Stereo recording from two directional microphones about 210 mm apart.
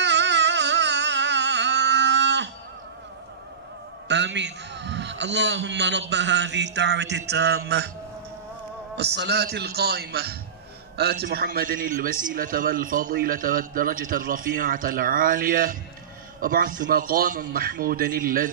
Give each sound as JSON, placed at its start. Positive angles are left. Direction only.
{"t": 0.0, "sound": "a sound", "side_deg": -55}
{"t": 4.1, "sound": "a man's voice", "side_deg": -55}
{"t": 8.9, "sound": "a man's voice", "side_deg": -55}